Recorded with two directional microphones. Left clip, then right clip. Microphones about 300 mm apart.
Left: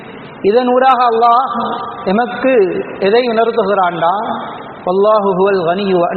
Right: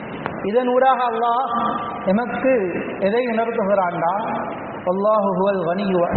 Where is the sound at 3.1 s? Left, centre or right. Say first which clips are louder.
Left 9 dB; left.